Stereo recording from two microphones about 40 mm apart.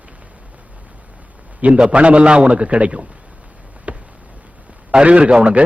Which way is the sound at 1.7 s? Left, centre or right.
Right.